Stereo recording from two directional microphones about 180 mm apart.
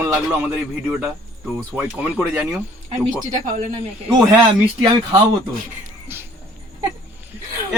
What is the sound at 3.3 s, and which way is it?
Speech, 45° right (ahead or behind).